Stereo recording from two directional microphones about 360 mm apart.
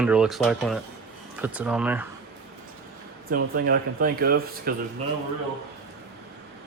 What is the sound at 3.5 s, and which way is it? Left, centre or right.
Speech, right.